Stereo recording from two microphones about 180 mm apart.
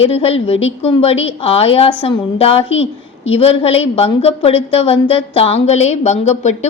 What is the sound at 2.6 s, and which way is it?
Speech, 90° left.